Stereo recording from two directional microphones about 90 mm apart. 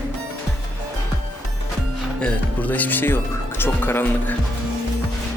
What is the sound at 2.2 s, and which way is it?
Speech, 15° left (ahead or behind).